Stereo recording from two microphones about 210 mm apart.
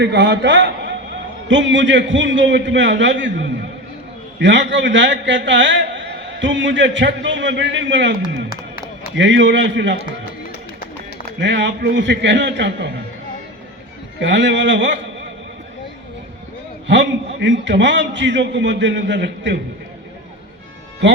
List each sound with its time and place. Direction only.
0.0 s a man's voice: 55° right (ahead or behind)
9.1 s a man's voice: 60° right (ahead or behind)
11.3 s a man's voice: 55° right (ahead or behind)
14.2 s a man's voice: 55° right (ahead or behind)
16.8 s a man's voice: 60° right (ahead or behind)
21.0 s a man's voice: 60° right (ahead or behind)